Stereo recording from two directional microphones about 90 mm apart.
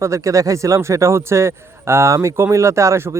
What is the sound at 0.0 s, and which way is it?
Speech, 35° right (ahead or behind).